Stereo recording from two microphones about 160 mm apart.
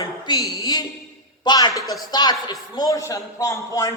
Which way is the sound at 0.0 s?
20° left (ahead or behind).